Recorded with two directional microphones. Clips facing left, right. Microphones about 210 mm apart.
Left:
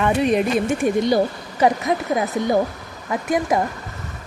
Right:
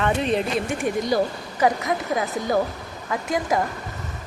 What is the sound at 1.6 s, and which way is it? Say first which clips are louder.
Speech: left 3 dB; 25° left (ahead or behind).